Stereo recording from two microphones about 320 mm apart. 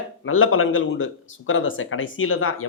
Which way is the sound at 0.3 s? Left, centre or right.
Left.